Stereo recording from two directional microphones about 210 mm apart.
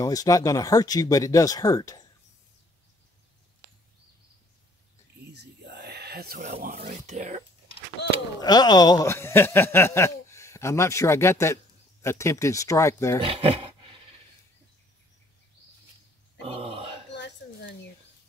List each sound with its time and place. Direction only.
0.0 s speech: 15° left (ahead or behind)
5.2 s a sound: 50° right (ahead or behind)
7.1 s whispering: 35° right (ahead or behind)
8.4 s a man's voice: 20° left (ahead or behind)
13.2 s speech: 25° right (ahead or behind)
16.4 s grunt: 25° right (ahead or behind)
17.1 s a sound: 60° left (ahead or behind)